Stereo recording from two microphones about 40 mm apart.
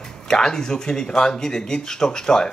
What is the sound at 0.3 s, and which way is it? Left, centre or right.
Speech, centre.